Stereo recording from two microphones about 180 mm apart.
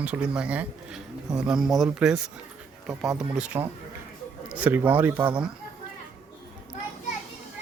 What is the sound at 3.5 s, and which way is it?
Speech, 30° right (ahead or behind).